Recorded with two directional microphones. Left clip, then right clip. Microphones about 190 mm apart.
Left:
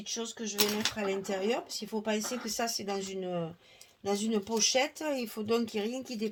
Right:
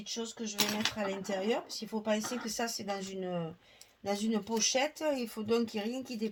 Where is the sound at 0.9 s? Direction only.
45° left (ahead or behind).